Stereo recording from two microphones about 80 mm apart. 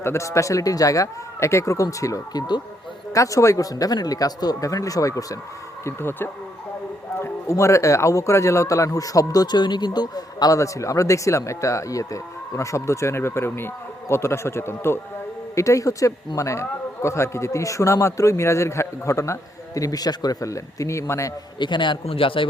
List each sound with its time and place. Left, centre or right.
0.0 s speech: left
5.8 s speech: left
7.2 s a man's voice: left
21.6 s a man's voice: left